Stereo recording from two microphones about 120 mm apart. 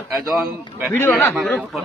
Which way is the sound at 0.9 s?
20° left (ahead or behind).